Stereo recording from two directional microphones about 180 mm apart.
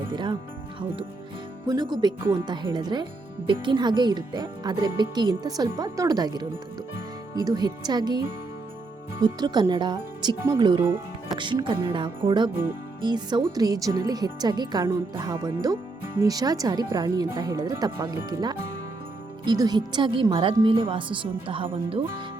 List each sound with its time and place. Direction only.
0.1 s speech: 25° right (ahead or behind)
1.6 s speech: 25° right (ahead or behind)
9.2 s speech: 25° right (ahead or behind)